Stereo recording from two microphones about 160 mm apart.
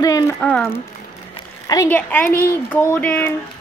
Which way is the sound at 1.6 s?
20° left (ahead or behind).